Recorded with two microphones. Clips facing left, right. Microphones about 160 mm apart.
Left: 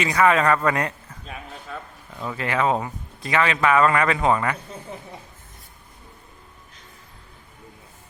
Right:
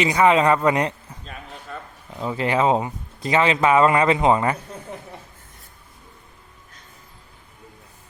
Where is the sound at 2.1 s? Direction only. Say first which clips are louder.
Right 4 dB; 20° right (ahead or behind).